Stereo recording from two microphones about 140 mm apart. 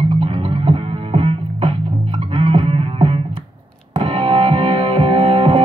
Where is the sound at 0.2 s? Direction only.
40° right (ahead or behind).